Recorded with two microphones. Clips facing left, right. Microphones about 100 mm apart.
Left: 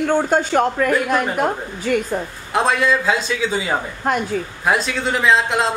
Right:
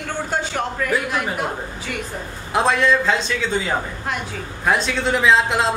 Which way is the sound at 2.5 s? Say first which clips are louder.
Even; centre (ahead or behind).